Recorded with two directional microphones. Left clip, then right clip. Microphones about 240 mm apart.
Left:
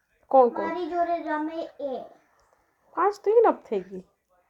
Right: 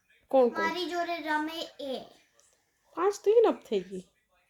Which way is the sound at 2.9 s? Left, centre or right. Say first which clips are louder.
Left 3 dB; centre.